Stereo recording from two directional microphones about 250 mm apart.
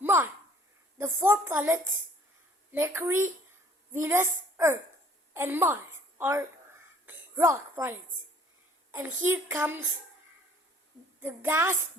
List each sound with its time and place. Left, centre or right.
0.0 s a sound: centre
0.9 s a child's voice: centre
11.2 s a child's voice: centre